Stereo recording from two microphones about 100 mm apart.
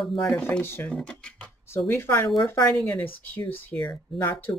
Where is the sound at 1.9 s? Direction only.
25° left (ahead or behind).